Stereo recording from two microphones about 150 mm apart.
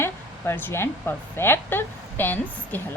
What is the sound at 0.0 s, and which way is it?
A woman's voice, 15° left (ahead or behind).